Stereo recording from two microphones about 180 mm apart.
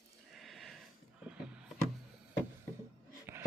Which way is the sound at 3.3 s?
15° right (ahead or behind).